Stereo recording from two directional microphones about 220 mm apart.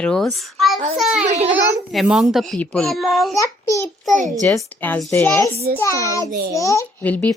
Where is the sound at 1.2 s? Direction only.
30° right (ahead or behind).